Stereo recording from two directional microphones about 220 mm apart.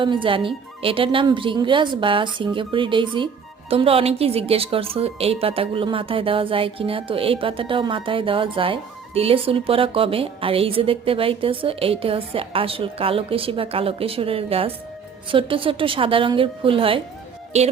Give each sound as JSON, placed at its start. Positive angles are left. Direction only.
{"t": 0.0, "sound": "speech", "side_deg": -20}